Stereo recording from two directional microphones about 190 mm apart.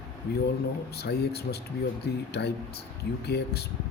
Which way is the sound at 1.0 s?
60° left (ahead or behind).